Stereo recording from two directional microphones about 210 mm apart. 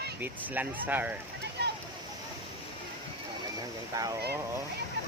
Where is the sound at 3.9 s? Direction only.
15° right (ahead or behind).